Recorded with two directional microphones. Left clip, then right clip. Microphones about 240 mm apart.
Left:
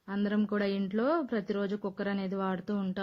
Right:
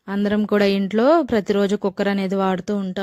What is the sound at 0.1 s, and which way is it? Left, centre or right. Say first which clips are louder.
A woman's voice: right 12 dB; right.